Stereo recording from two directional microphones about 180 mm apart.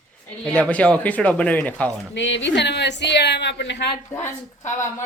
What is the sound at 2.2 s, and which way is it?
A woman's voice, 85° left.